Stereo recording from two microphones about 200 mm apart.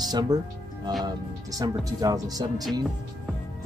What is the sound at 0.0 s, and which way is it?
Speech, 20° right (ahead or behind).